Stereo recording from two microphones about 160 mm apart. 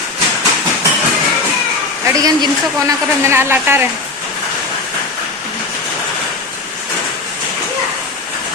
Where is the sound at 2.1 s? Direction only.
20° right (ahead or behind).